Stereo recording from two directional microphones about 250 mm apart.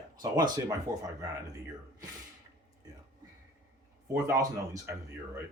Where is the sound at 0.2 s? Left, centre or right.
Centre.